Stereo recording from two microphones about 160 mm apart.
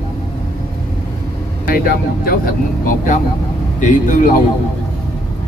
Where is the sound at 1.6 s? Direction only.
65° left (ahead or behind).